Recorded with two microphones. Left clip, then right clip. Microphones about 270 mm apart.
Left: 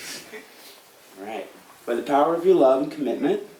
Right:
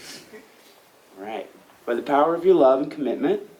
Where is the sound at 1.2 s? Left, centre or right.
Centre.